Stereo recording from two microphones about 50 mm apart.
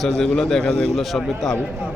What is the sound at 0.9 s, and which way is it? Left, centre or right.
Speech, centre.